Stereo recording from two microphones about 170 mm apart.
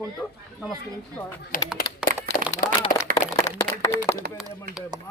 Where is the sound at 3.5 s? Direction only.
15° left (ahead or behind).